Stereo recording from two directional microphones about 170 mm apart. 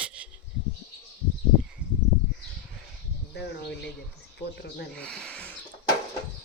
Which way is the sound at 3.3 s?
80° left.